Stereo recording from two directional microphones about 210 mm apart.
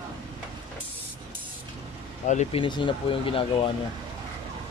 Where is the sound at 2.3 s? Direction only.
35° left (ahead or behind).